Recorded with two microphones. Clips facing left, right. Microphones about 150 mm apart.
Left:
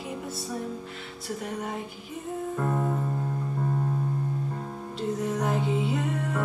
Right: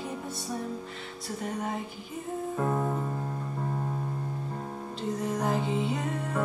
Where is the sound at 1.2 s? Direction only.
Centre (ahead or behind).